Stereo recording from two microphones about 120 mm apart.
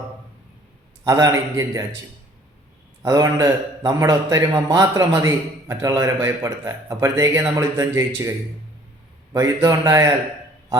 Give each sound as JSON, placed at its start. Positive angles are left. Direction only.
{"t": 1.0, "sound": "a man's voice", "side_deg": -30}
{"t": 3.0, "sound": "a man's voice", "side_deg": -30}
{"t": 9.6, "sound": "a man's voice", "side_deg": -30}